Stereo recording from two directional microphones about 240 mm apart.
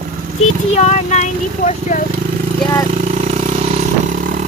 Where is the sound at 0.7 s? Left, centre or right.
Left.